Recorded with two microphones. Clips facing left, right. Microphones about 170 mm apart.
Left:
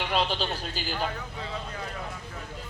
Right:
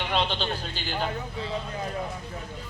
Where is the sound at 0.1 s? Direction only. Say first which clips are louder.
Right 1 dB; 5° left (ahead or behind).